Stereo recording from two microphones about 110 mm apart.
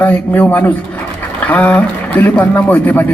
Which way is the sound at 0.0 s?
15° left (ahead or behind).